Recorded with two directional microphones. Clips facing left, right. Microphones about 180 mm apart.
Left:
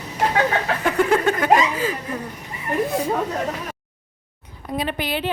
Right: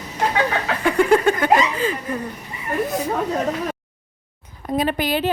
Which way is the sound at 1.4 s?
5° left (ahead or behind).